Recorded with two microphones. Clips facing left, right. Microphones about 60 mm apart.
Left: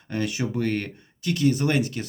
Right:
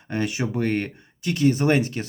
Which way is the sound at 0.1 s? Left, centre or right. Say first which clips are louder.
Right 1 dB; right.